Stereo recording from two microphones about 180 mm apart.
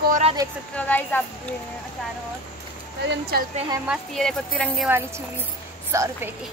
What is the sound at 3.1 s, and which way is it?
Speech, 60° right (ahead or behind).